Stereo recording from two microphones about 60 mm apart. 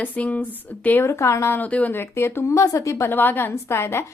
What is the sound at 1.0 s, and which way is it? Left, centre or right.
Speech, left.